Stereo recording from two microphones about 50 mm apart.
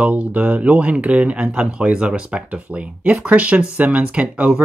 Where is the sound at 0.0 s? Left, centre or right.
Right.